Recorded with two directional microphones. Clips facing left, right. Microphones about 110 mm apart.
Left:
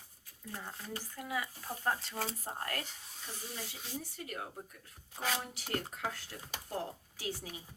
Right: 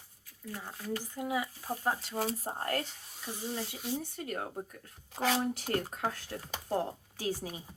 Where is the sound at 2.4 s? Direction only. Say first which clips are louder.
Right 6 dB; 30° right (ahead or behind).